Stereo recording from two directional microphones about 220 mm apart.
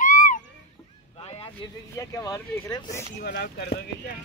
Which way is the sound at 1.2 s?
25° left (ahead or behind).